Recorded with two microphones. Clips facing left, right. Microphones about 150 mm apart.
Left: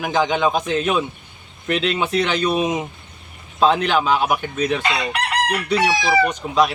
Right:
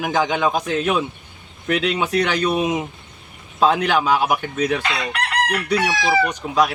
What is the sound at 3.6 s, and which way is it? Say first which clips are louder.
A man's voice: even; 10° right (ahead or behind).